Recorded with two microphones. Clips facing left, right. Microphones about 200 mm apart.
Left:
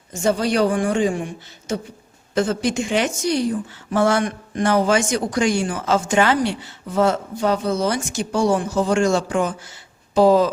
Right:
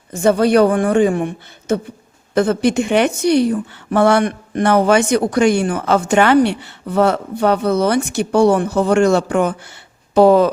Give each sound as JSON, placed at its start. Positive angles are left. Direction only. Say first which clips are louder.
{"t": 0.1, "sound": "a woman's voice", "louder": "right 7 dB", "side_deg": -60}